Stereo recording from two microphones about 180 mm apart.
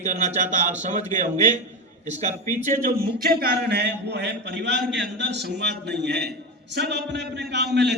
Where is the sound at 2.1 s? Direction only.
40° right (ahead or behind).